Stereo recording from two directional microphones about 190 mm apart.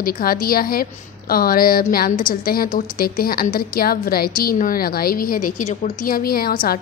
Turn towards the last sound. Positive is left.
turn(degrees=50)  # may be behind; listen again after turning